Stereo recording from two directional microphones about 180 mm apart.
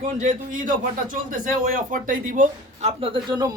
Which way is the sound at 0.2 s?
45° right (ahead or behind).